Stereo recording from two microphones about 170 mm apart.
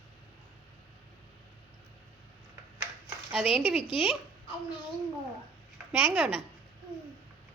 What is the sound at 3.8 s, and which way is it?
Speech, 35° left (ahead or behind).